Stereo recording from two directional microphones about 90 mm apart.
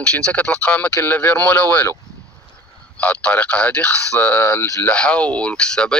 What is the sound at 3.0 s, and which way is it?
Speech, 15° left (ahead or behind).